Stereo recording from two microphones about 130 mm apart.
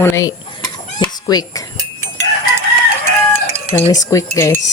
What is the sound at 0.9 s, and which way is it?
Cat, 30° left (ahead or behind).